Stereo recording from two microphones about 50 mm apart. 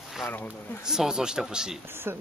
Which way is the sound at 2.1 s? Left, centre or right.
Right.